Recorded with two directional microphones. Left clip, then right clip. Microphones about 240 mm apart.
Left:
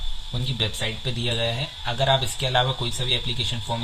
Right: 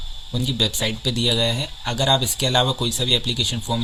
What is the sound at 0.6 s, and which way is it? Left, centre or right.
Speech, right.